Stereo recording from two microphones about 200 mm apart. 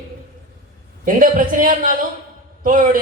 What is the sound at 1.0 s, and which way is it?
A man's voice, 40° right (ahead or behind).